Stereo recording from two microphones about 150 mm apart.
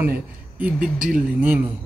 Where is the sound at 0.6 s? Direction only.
10° right (ahead or behind).